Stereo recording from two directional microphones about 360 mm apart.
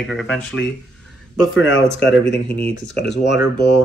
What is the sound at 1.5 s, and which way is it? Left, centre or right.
Speech, left.